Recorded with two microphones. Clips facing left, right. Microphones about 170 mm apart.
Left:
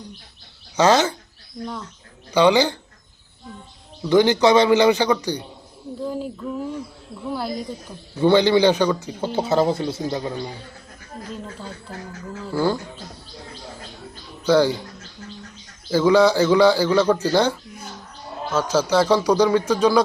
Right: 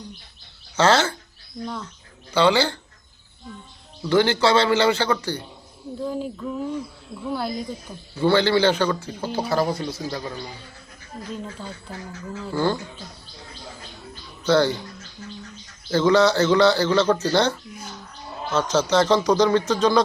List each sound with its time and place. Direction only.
0.8 s a man's voice: 15° left (ahead or behind)
1.6 s speech: 5° left (ahead or behind)
2.3 s a man's voice: 15° left (ahead or behind)
4.1 s a man's voice: 15° left (ahead or behind)
6.1 s speech: 5° left (ahead or behind)
8.2 s a man's voice: 15° left (ahead or behind)
12.5 s a man's voice: 10° left (ahead or behind)
14.4 s a man's voice: 10° left (ahead or behind)
15.9 s a man's voice: 10° left (ahead or behind)